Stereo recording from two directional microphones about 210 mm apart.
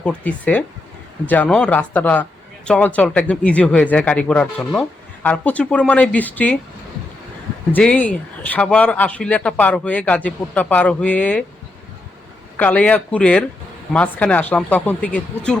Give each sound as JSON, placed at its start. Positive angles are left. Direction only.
{"t": 0.0, "sound": "speech", "side_deg": 5}
{"t": 7.7, "sound": "speech", "side_deg": 5}
{"t": 12.5, "sound": "speech", "side_deg": 5}